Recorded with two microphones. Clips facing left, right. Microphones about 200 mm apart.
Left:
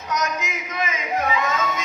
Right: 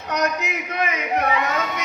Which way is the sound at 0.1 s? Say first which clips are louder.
Right 3 dB; 65° right (ahead or behind).